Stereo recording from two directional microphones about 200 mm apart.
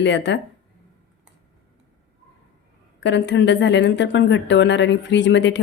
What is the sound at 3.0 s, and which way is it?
A woman's voice, 60° left (ahead or behind).